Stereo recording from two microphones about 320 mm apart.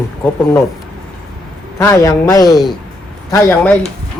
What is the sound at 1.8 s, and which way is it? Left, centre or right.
A man's voice, centre.